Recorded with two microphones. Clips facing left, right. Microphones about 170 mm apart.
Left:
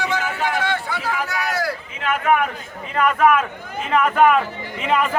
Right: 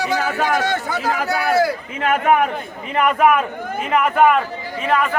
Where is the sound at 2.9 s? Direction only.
15° right (ahead or behind).